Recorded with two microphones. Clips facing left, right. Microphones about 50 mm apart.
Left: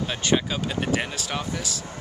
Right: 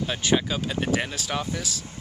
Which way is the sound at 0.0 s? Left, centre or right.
Centre.